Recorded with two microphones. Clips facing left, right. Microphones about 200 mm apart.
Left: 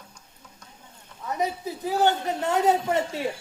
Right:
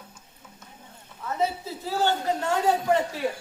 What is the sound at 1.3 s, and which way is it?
A woman's voice, 15° left (ahead or behind).